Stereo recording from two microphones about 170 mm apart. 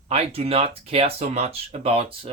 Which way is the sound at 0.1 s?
35° right (ahead or behind).